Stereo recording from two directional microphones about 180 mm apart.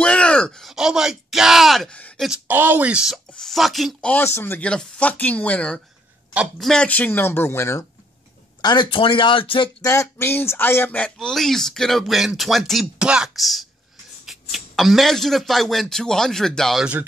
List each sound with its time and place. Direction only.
0.0 s groan: 5° left (ahead or behind)
2.2 s speech: 5° right (ahead or behind); by 7.8 s 15° left (ahead or behind)
8.5 s speech: 25° left (ahead or behind)
9.8 s speech: 15° left (ahead or behind); by 17.0 s 5° right (ahead or behind)